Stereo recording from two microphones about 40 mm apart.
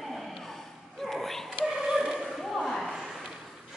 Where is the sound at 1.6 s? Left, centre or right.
Centre.